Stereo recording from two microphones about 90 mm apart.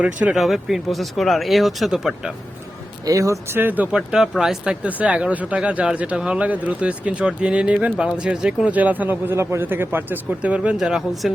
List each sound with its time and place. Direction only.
0.0 s speech: 15° right (ahead or behind)
0.3 s speech: centre (ahead or behind)
3.1 s speech: 40° right (ahead or behind)
3.5 s speech: 20° right (ahead or behind)
3.9 s speech: 5° right (ahead or behind)